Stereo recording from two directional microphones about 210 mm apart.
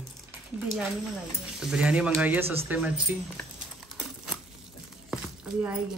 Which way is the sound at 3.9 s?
5° right (ahead or behind).